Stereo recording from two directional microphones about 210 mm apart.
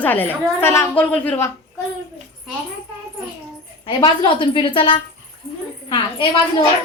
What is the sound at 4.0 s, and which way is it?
A woman's voice, 25° left (ahead or behind).